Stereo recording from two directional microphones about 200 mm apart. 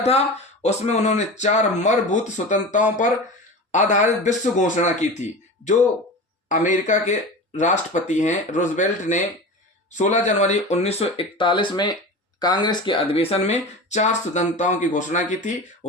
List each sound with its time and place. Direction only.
0.0 s speech: 30° left (ahead or behind)